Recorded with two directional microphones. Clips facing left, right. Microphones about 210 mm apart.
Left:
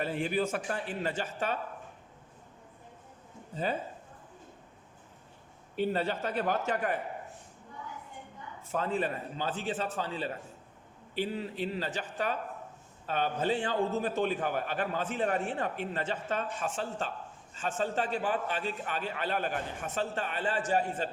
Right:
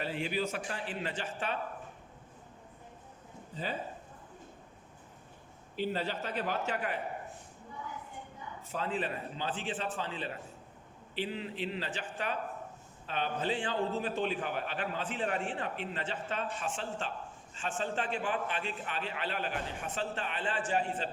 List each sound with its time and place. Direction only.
0.0 s a man's voice: 45° left (ahead or behind)
5.9 s a man's voice: 50° left (ahead or behind)
8.7 s a man's voice: 45° left (ahead or behind)